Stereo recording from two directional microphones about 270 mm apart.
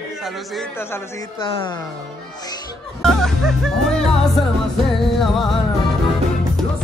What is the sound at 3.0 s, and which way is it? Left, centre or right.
Speech, centre.